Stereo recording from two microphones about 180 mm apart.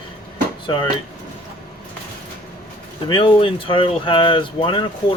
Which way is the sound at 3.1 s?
30° left (ahead or behind).